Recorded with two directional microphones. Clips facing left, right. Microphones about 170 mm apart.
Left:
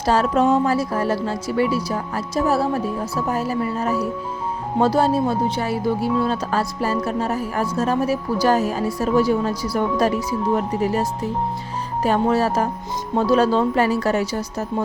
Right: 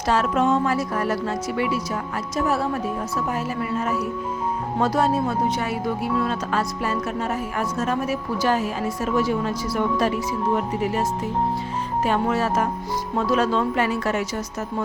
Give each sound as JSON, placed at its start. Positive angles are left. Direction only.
{"t": 0.0, "sound": "speech", "side_deg": 35}
{"t": 12.0, "sound": "speech", "side_deg": 35}